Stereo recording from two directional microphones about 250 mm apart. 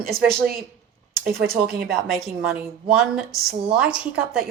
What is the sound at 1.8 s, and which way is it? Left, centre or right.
Speech, centre.